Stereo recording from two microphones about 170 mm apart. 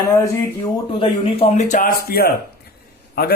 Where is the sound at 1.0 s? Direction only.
35° left (ahead or behind); by 1.9 s 50° left (ahead or behind).